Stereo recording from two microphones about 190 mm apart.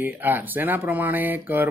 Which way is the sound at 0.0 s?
10° right (ahead or behind).